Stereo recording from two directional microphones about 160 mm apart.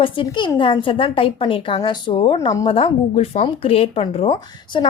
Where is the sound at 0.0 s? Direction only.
30° left (ahead or behind).